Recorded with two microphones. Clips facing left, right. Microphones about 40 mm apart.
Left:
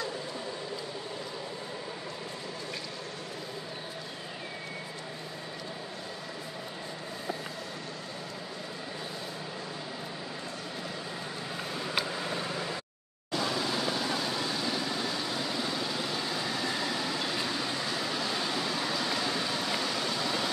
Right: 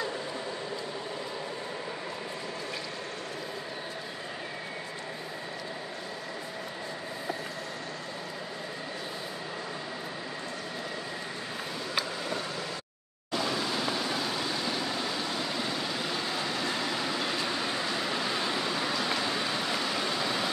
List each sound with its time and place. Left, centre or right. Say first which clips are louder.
12.4 s vehicle: left 1 dB; centre
13.3 s vehicle: even; centre